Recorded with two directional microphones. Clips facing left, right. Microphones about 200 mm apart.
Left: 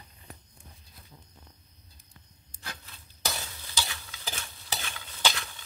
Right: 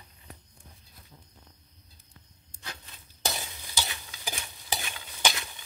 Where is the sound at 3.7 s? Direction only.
15° right (ahead or behind).